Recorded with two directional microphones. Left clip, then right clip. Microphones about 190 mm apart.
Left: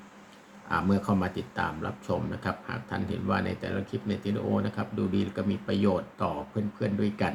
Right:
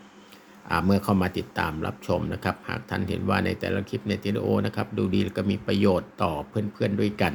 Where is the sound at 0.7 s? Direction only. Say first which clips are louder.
Right 4 dB; 50° right (ahead or behind).